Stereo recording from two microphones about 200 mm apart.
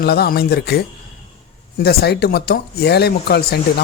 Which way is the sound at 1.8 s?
55° left (ahead or behind).